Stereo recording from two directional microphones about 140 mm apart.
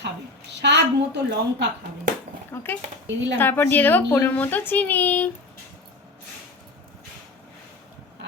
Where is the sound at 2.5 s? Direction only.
15° left (ahead or behind).